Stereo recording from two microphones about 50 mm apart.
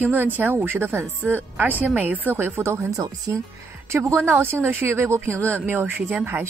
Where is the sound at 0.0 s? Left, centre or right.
Right.